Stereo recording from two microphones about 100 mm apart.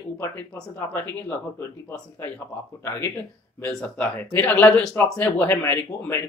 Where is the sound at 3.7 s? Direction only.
5° left (ahead or behind).